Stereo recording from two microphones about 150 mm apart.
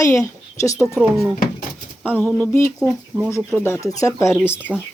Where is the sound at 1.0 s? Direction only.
5° right (ahead or behind).